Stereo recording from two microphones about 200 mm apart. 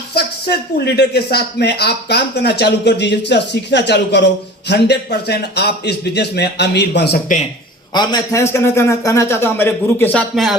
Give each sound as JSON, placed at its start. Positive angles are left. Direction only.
{"t": 0.1, "sound": "speech", "side_deg": 55}
{"t": 7.9, "sound": "a man's voice", "side_deg": 20}